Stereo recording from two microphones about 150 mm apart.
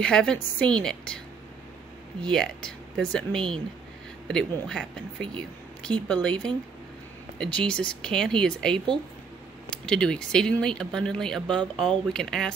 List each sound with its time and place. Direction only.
0.0 s a woman's voice: 5° left (ahead or behind)
2.2 s a woman's voice: 5° left (ahead or behind)